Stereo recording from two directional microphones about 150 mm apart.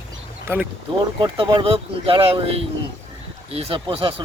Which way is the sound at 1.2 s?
30° right (ahead or behind).